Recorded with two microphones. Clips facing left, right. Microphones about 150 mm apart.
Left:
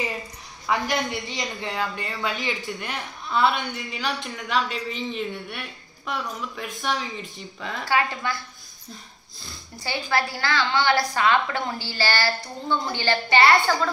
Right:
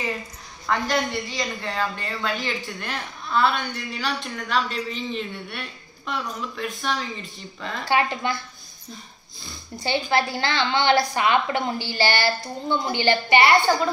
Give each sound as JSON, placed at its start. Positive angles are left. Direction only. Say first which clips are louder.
{"t": 0.7, "sound": "speech", "louder": "right 1 dB", "side_deg": 15}
{"t": 7.9, "sound": "a woman's voice", "louder": "right 2 dB", "side_deg": -20}
{"t": 9.8, "sound": "a woman's voice", "louder": "right 3 dB", "side_deg": -25}